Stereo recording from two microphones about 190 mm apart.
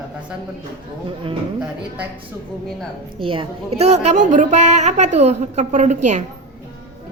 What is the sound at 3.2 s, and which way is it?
A woman's voice, 25° right (ahead or behind).